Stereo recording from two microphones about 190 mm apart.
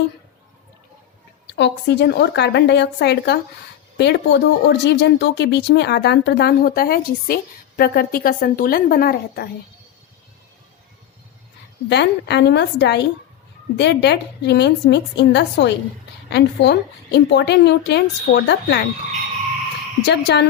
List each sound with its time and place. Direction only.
1.5 s a woman's voice: 65° left (ahead or behind)
11.9 s speech: 60° left (ahead or behind)
20.1 s speech: 65° left (ahead or behind)